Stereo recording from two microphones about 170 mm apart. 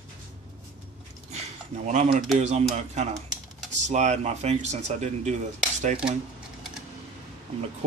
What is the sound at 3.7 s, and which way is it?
Speech, 45° right (ahead or behind).